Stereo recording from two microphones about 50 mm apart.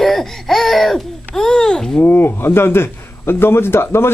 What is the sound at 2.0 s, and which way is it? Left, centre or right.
A man's voice, left.